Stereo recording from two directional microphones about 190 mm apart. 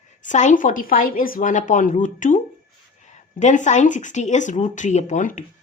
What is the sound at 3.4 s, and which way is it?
A woman's voice, 40° left (ahead or behind).